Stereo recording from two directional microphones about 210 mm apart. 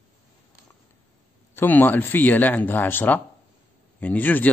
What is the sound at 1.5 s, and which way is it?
Speech, 10° left (ahead or behind).